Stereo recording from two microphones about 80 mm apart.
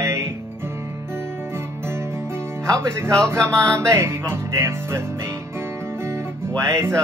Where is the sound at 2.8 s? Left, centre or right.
Right.